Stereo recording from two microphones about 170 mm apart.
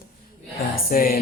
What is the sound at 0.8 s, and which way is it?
Mantra, 60° left (ahead or behind).